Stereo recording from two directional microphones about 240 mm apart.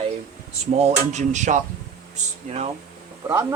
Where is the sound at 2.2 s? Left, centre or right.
Right.